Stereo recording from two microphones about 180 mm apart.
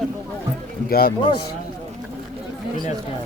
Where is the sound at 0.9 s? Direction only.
55° left (ahead or behind).